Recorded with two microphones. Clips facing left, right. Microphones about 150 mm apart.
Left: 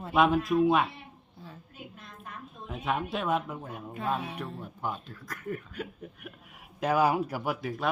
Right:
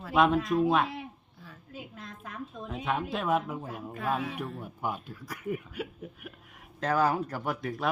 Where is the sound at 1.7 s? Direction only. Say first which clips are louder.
Right 3 dB; 90° right.